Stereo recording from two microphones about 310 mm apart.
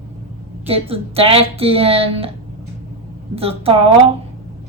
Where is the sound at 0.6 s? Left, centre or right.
Centre.